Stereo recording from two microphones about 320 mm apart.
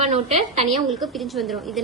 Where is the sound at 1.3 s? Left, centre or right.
Centre.